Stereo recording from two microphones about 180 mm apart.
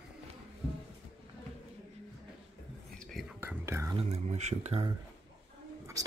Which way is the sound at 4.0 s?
40° right (ahead or behind).